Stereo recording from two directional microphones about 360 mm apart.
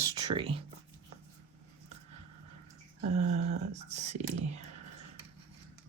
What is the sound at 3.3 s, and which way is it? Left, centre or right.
Speech, centre.